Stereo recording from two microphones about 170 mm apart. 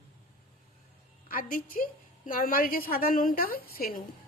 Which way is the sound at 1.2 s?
55° left (ahead or behind).